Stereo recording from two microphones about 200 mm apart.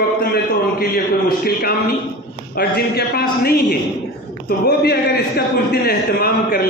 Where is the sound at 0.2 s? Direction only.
50° left (ahead or behind).